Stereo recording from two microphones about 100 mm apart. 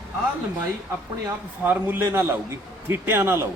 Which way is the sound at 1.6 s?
20° right (ahead or behind).